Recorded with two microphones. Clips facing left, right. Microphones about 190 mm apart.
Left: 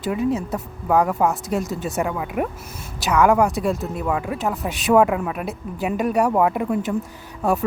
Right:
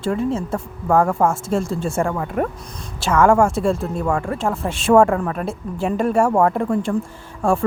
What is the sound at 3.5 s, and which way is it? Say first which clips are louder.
Speech: right 3 dB; 30° right (ahead or behind).